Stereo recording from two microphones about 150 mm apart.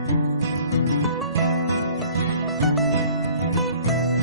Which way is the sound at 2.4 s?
Centre (ahead or behind).